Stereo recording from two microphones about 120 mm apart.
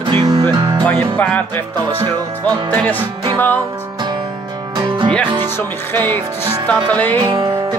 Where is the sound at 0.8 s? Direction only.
10° left (ahead or behind).